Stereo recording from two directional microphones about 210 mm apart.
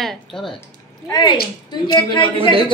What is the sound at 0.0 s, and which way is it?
Speech, centre (ahead or behind).